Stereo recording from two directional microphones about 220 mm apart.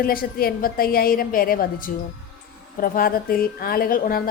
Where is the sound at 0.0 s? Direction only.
40° left (ahead or behind).